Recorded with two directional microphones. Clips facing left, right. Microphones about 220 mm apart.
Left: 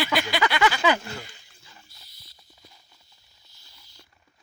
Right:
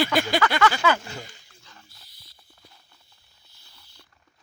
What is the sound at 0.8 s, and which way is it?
Speech, 20° left (ahead or behind).